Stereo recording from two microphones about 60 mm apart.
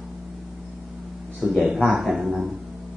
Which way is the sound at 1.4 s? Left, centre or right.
Centre.